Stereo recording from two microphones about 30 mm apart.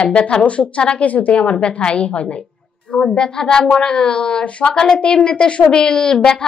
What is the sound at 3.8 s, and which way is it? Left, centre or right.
A woman's voice, left.